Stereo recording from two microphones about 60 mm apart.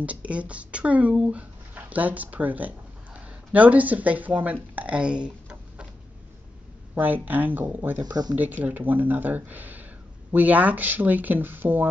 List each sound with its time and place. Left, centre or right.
0.0 s speech: right
7.0 s speech: right